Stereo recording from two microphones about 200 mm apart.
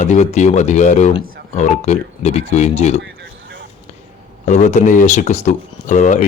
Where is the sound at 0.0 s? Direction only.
35° left (ahead or behind).